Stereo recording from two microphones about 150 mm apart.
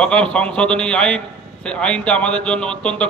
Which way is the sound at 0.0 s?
5° left (ahead or behind).